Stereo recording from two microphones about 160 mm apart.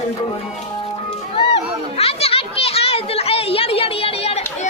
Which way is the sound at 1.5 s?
40° left (ahead or behind).